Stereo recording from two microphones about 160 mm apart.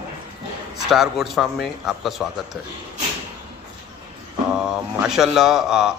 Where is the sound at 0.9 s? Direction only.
Centre (ahead or behind).